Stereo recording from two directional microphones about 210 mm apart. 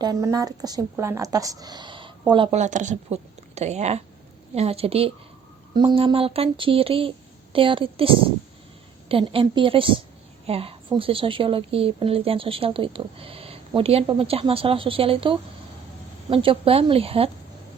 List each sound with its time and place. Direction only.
0.0 s speech: 15° right (ahead or behind)